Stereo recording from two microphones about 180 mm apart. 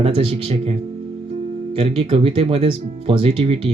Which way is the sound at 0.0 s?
30° right (ahead or behind).